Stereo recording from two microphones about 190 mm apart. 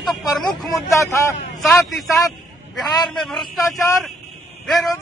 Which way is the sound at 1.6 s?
Centre (ahead or behind).